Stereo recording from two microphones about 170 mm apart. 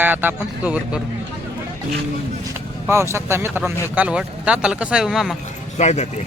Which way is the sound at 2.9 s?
15° right (ahead or behind).